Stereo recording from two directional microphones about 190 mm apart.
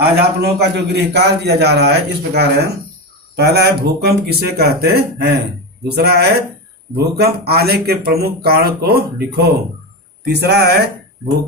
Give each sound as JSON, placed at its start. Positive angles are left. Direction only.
{"t": 0.0, "sound": "speech", "side_deg": -60}